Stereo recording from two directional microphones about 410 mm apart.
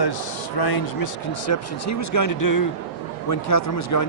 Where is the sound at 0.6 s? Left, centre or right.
Left.